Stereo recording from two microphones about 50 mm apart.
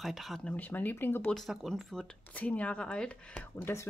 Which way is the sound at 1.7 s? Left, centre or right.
Centre.